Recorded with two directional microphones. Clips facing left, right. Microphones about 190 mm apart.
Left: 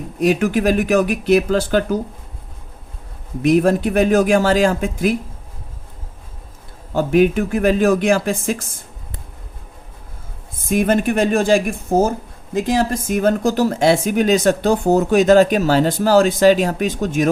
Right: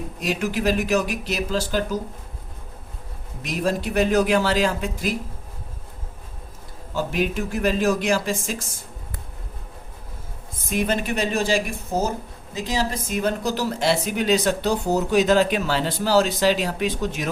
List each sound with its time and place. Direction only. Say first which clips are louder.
0.2 s speech: left 9 dB; 55° left (ahead or behind)
3.4 s speech: left 10 dB; 55° left (ahead or behind)
6.9 s speech: left 9 dB; 55° left (ahead or behind)
10.7 s speech: left 7 dB; 50° left (ahead or behind)